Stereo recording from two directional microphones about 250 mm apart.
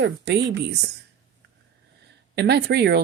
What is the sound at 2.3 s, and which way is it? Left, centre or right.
Speech, right.